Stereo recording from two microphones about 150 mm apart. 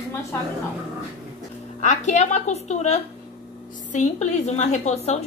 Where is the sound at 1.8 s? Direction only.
55° left (ahead or behind).